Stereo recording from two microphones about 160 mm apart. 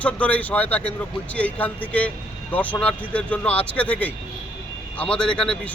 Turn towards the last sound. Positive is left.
turn(degrees=5)  # may be behind; listen again after turning